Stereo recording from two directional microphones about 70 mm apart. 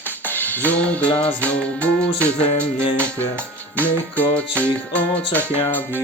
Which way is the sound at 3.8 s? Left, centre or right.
Left.